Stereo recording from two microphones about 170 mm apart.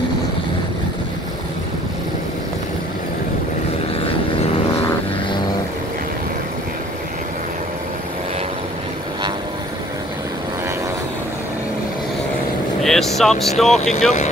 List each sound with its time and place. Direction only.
12.8 s vehicle: centre (ahead or behind)
13.7 s speech: 40° left (ahead or behind)